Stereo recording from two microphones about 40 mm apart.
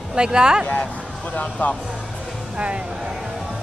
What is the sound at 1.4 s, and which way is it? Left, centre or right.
Speech, left.